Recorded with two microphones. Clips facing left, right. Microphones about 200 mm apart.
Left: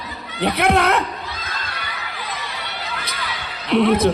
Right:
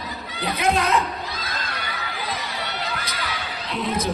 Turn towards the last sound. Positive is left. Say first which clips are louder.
# left 10 dB
turn(degrees=65)  # may be behind; listen again after turning